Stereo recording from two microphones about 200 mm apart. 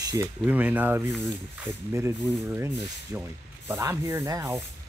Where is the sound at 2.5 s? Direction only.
15° right (ahead or behind).